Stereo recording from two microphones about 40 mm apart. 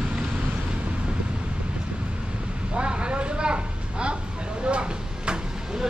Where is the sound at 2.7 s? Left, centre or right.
Right.